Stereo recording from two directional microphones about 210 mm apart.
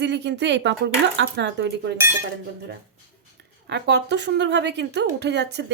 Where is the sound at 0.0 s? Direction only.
55° right (ahead or behind).